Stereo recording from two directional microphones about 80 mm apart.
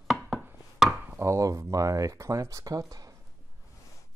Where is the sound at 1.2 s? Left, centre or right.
Right.